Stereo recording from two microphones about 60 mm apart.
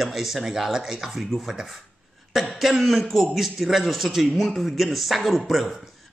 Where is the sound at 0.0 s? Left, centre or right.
Centre.